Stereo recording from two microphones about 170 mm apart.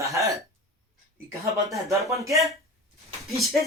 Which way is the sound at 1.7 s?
20° right (ahead or behind).